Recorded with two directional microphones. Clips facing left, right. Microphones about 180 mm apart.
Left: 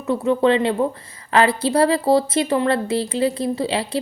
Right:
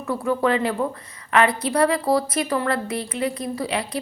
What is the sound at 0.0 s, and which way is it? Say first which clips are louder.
A woman's voice: left 4 dB; 25° left (ahead or behind).